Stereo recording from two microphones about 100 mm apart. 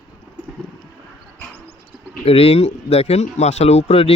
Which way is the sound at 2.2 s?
85° left.